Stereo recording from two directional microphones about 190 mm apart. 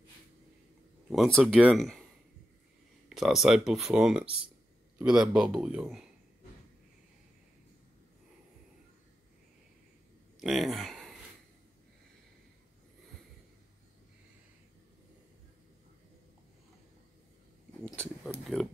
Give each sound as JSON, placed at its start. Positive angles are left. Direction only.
{"t": 1.1, "sound": "speech", "side_deg": 0}
{"t": 3.1, "sound": "speech", "side_deg": 0}
{"t": 10.4, "sound": "speech", "side_deg": 0}
{"t": 17.8, "sound": "a sound", "side_deg": 5}